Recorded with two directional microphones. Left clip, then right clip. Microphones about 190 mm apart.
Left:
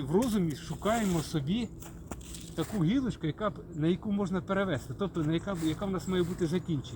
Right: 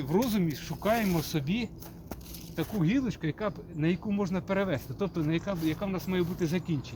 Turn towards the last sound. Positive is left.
turn(degrees=-20)  # may be behind; listen again after turning